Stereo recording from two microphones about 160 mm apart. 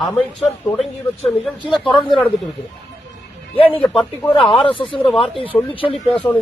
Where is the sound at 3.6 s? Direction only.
35° left (ahead or behind).